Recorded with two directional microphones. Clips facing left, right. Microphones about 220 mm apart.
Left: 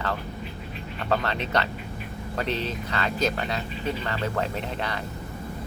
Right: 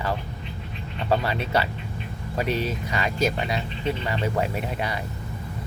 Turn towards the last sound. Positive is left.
turn(degrees=-10)  # may be behind; listen again after turning